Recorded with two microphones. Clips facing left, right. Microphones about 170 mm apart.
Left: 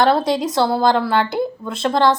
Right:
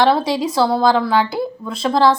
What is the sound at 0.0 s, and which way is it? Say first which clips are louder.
A woman's voice: even; centre (ahead or behind).